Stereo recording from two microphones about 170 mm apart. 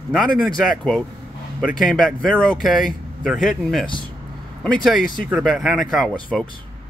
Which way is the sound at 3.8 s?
30° left (ahead or behind).